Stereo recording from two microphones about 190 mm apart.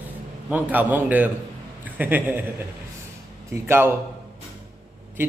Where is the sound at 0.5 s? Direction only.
10° right (ahead or behind).